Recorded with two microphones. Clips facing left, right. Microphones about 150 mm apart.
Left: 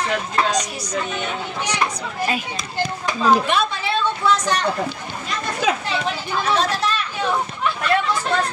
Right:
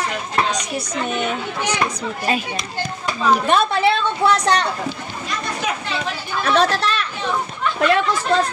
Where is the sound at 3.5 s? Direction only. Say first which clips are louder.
Right 5 dB; 65° right (ahead or behind).